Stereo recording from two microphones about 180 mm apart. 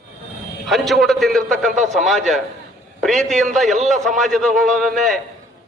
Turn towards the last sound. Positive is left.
turn(degrees=0)  # may be behind; listen again after turning